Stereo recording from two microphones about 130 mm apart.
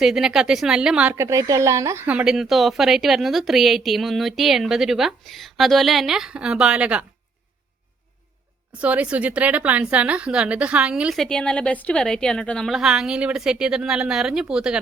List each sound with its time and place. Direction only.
0.0 s a woman's voice: 5° right (ahead or behind)
1.1 s a woman's voice: 25° right (ahead or behind)
2.0 s a woman's voice: 5° right (ahead or behind)
8.8 s a woman's voice: 10° right (ahead or behind)